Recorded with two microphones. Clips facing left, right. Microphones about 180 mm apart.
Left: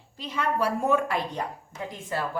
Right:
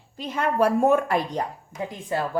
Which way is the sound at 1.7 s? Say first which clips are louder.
Right 5 dB; 20° right (ahead or behind).